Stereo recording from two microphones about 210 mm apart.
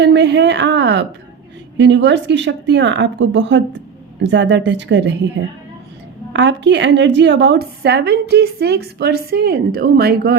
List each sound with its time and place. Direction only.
0.0 s speech: 55° right (ahead or behind)
6.4 s a woman's voice: 55° right (ahead or behind)